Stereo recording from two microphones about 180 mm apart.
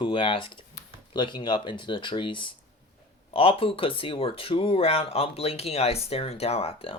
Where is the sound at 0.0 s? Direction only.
30° left (ahead or behind).